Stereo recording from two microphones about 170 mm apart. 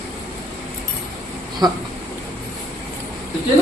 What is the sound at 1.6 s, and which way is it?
Speech, 25° right (ahead or behind).